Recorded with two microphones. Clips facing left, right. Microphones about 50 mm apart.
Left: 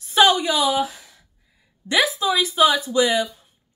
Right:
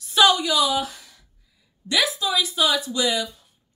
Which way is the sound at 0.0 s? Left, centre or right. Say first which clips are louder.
Left 2 dB; left.